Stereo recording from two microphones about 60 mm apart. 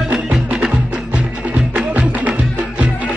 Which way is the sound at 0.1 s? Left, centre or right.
Right.